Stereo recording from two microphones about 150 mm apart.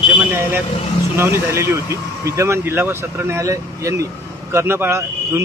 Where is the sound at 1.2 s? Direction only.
20° right (ahead or behind).